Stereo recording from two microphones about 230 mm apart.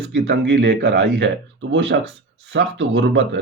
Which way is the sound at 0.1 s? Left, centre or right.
Right.